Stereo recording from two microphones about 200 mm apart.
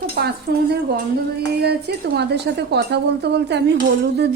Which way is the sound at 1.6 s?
55° right (ahead or behind).